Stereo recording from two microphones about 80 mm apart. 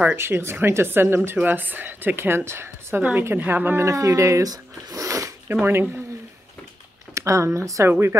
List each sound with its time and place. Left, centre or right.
0.1 s speech: right
3.0 s speech: right
3.8 s speech: right
5.5 s speech: right
7.2 s speech: right